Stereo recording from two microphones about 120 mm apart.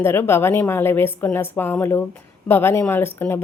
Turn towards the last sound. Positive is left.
turn(degrees=20)  # may be behind; listen again after turning